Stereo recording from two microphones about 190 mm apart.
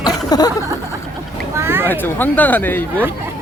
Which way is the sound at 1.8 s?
10° left (ahead or behind).